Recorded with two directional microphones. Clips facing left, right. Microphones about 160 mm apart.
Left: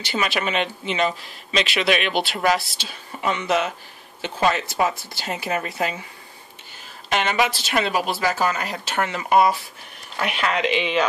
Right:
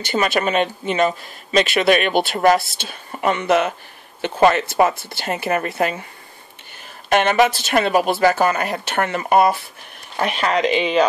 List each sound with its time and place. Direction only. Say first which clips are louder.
0.0 s speech: right 5 dB; 50° right (ahead or behind)
7.1 s speech: right 6 dB; 55° right (ahead or behind)
10.1 s speech: right 4 dB; 40° right (ahead or behind)